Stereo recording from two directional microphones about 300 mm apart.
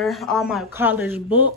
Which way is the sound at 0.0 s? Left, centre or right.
Centre.